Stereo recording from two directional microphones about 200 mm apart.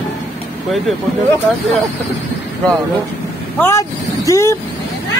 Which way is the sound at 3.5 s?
15° left (ahead or behind).